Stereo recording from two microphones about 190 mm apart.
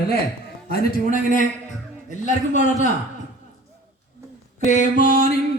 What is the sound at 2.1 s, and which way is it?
Speech, 40° left (ahead or behind).